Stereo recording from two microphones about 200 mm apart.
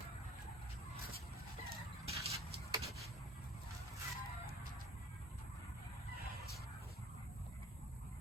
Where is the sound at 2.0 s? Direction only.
30° right (ahead or behind).